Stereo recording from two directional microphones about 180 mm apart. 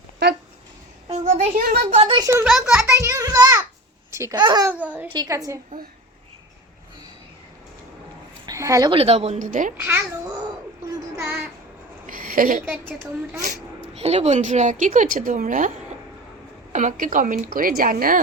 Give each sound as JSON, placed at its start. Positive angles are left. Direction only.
{"t": 1.0, "sound": "a sound", "side_deg": -40}
{"t": 2.1, "sound": "a child's voice", "side_deg": -20}
{"t": 2.4, "sound": "a child's voice", "side_deg": 0}
{"t": 2.9, "sound": "a sound", "side_deg": -20}
{"t": 4.1, "sound": "a child's voice", "side_deg": -15}
{"t": 8.4, "sound": "speech", "side_deg": -15}
{"t": 8.9, "sound": "speech", "side_deg": -35}
{"t": 11.2, "sound": "speech", "side_deg": -10}
{"t": 12.0, "sound": "a sound", "side_deg": -50}
{"t": 13.9, "sound": "speech", "side_deg": -35}
{"t": 16.7, "sound": "speech", "side_deg": -45}